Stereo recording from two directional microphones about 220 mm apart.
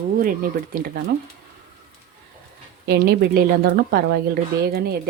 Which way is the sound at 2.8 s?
45° right (ahead or behind).